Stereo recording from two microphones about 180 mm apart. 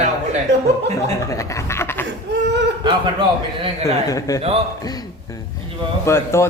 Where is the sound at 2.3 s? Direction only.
75° right (ahead or behind).